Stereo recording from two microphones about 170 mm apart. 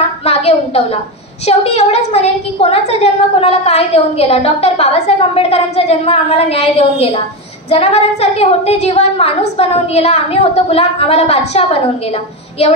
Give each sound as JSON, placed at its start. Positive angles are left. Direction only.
{"t": 0.2, "sound": "a woman's voice", "side_deg": 40}